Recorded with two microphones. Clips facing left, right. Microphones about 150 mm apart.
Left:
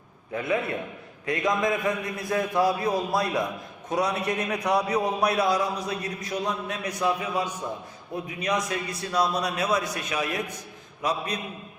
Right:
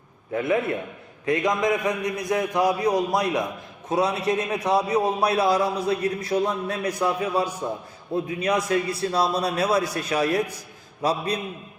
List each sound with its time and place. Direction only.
0.3 s a man's voice: 25° right (ahead or behind)